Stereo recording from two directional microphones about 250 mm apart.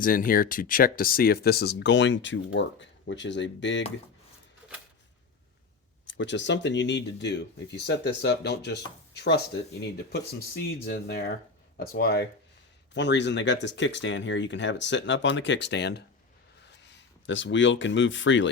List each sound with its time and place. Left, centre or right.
0.0 s speech: left
6.1 s speech: left